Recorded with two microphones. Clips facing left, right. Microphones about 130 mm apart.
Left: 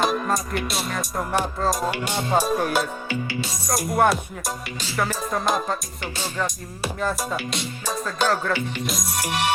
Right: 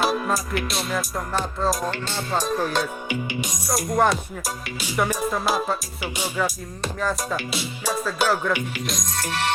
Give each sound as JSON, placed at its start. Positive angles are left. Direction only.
{"t": 0.0, "sound": "music", "side_deg": -5}
{"t": 1.8, "sound": "music", "side_deg": 15}
{"t": 3.1, "sound": "music", "side_deg": -15}
{"t": 3.7, "sound": "music", "side_deg": 0}
{"t": 4.8, "sound": "music", "side_deg": -15}
{"t": 5.3, "sound": "music", "side_deg": -5}
{"t": 6.8, "sound": "music", "side_deg": 5}
{"t": 9.1, "sound": "music", "side_deg": 15}